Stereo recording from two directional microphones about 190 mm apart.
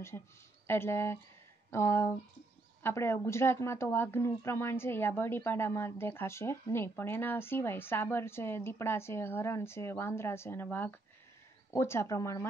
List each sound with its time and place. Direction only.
0.7 s speech: 15° left (ahead or behind)